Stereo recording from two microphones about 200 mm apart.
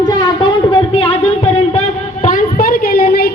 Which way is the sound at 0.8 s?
30° left (ahead or behind).